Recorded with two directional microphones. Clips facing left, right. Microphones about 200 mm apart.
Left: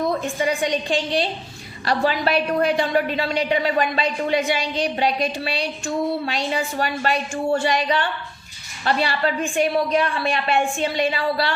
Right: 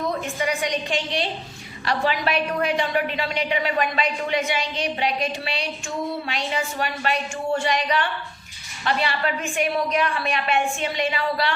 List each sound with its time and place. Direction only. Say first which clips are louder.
0.3 s a woman's voice: left 3 dB; 30° left (ahead or behind)